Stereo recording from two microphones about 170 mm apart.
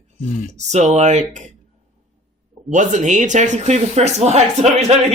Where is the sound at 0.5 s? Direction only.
40° right (ahead or behind).